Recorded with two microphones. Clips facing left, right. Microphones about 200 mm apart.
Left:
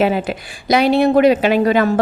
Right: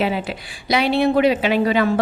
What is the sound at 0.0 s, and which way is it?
A woman's voice, 45° left (ahead or behind).